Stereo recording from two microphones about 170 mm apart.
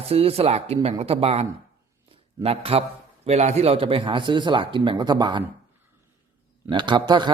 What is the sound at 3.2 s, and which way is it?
Speech, 40° right (ahead or behind).